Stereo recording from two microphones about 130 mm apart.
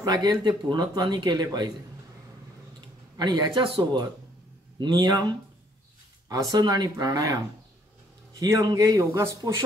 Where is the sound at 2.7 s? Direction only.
35° right (ahead or behind).